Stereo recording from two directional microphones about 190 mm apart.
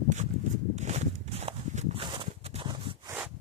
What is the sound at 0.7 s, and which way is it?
Walk, 35° right (ahead or behind).